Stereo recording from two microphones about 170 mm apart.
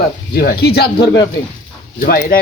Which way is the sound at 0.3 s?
65° left (ahead or behind).